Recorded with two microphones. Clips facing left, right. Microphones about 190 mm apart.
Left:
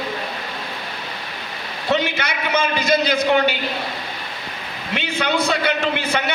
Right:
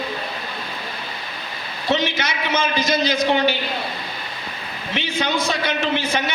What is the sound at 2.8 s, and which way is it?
Speech, 60° left (ahead or behind).